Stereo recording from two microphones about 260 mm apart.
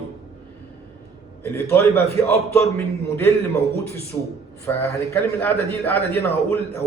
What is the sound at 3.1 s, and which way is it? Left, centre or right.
A man's voice, centre.